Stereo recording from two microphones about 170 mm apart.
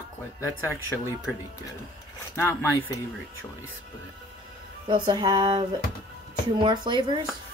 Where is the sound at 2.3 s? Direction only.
10° left (ahead or behind).